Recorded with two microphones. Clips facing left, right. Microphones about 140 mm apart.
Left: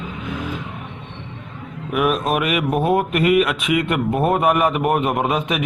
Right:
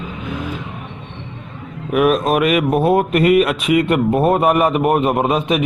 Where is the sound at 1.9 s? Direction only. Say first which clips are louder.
Right 5 dB; 45° right (ahead or behind).